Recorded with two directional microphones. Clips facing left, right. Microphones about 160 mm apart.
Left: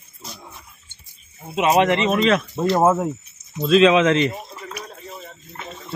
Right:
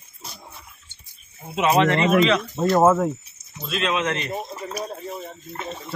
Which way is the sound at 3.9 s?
90° left.